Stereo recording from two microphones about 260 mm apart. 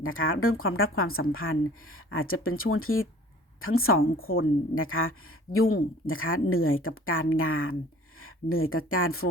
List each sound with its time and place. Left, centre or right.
0.0 s a woman's voice: left
5.5 s speech: left
6.1 s a woman's voice: left